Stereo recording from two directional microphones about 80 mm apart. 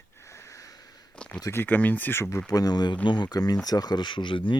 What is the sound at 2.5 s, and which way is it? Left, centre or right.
Speech, left.